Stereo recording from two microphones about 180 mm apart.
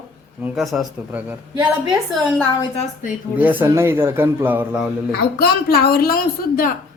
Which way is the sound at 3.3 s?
10° right (ahead or behind).